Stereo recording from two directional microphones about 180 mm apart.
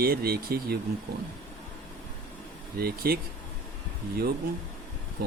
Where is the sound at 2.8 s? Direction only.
60° right (ahead or behind).